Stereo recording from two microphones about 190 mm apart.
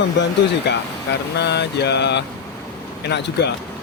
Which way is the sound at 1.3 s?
60° left (ahead or behind).